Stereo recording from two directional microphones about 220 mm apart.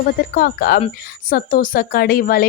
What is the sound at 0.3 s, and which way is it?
Speech, 40° left (ahead or behind).